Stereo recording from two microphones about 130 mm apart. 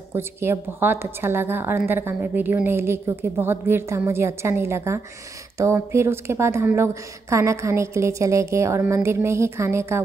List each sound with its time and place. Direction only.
0.1 s a woman's voice: 20° right (ahead or behind)